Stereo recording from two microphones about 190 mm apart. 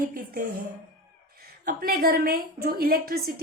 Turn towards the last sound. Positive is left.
turn(degrees=-50)  # may be behind; listen again after turning